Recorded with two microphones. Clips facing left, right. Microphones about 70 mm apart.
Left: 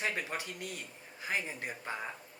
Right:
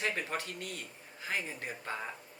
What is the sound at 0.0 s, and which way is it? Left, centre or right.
Speech, centre.